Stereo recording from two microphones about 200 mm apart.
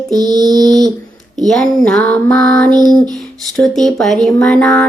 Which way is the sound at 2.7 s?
20° right (ahead or behind).